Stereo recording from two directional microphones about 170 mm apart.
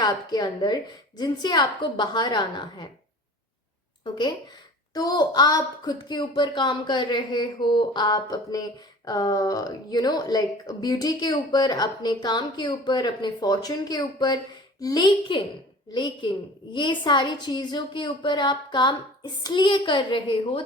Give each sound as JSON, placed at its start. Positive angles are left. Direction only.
{"t": 0.0, "sound": "a woman's voice", "side_deg": 25}
{"t": 4.9, "sound": "a woman's voice", "side_deg": 20}